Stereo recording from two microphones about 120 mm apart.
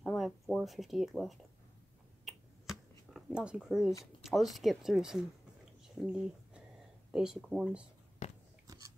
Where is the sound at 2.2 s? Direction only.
Centre (ahead or behind).